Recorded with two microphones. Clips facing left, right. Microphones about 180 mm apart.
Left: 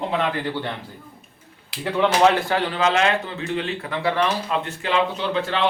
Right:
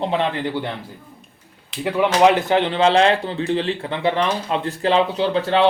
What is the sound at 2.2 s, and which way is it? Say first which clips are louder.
A man's voice: right 3 dB; 20° right (ahead or behind).